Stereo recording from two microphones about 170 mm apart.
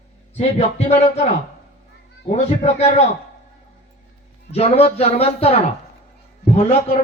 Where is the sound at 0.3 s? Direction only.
35° left (ahead or behind).